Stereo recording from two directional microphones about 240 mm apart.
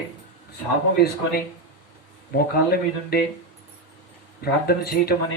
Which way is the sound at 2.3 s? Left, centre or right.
Left.